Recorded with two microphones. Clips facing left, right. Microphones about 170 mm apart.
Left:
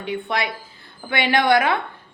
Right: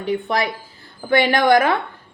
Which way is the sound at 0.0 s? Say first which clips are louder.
Right 4 dB; 40° right (ahead or behind).